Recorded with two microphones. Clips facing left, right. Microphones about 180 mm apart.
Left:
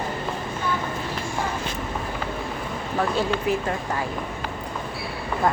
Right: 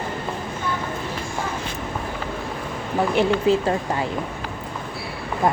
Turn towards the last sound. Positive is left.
turn(degrees=-25)  # may be behind; listen again after turning